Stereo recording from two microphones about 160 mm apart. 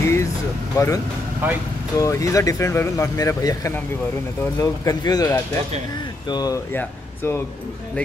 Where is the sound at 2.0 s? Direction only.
20° left (ahead or behind).